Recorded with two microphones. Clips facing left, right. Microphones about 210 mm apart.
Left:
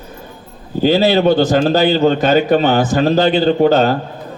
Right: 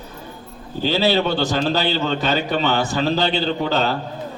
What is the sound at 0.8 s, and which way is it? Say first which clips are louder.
Speech: left 7 dB; 45° left (ahead or behind).